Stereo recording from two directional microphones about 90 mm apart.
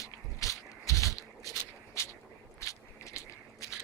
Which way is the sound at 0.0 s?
40° left (ahead or behind).